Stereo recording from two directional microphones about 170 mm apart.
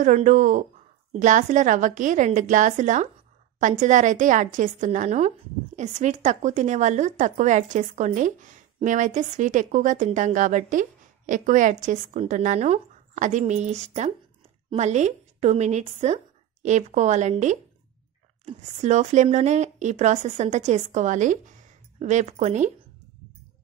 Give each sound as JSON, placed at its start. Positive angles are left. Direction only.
{"t": 0.0, "sound": "a woman's voice", "side_deg": -45}